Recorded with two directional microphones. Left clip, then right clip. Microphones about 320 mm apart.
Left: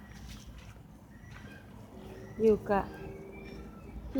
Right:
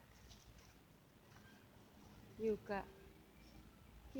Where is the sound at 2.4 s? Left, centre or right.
Centre.